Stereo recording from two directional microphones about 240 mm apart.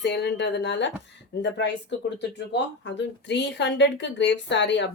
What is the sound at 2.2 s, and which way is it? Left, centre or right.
Speech, left.